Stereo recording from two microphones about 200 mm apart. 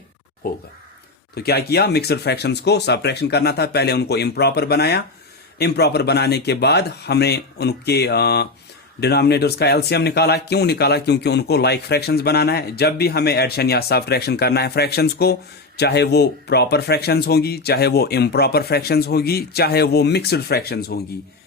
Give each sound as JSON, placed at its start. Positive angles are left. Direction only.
{"t": 0.4, "sound": "speech", "side_deg": 45}